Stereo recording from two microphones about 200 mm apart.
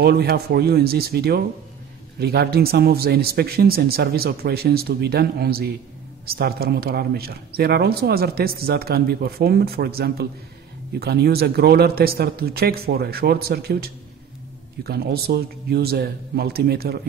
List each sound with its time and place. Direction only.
0.0 s speech: 55° right (ahead or behind)